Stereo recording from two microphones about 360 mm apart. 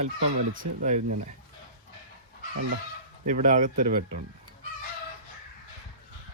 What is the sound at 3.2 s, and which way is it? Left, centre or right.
Speech, right.